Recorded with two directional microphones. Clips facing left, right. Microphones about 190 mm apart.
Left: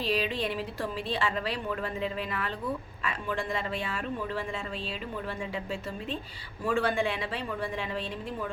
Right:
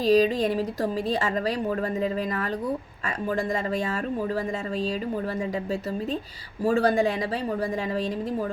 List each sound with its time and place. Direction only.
0.0 s a woman's voice: 40° right (ahead or behind)
6.7 s a woman's voice: 40° right (ahead or behind)